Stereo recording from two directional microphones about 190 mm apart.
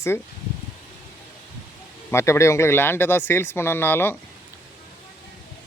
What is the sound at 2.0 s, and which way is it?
Speech, 15° left (ahead or behind).